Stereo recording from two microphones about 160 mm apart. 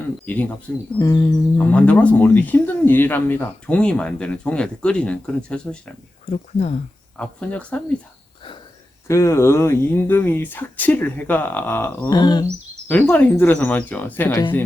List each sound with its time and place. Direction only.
0.3 s speech: 10° left (ahead or behind)
1.7 s speech: 10° left (ahead or behind)
6.3 s speech: 45° left (ahead or behind)
7.2 s speech: 5° left (ahead or behind)
9.0 s speech: 15° left (ahead or behind)
12.1 s speech: 25° left (ahead or behind)
12.9 s speech: 10° left (ahead or behind)